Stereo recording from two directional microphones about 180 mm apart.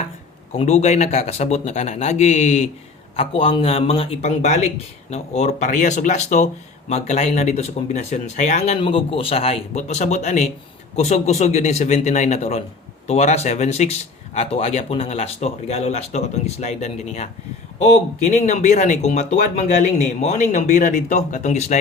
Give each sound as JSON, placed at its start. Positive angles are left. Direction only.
{"t": 0.5, "sound": "speech", "side_deg": 35}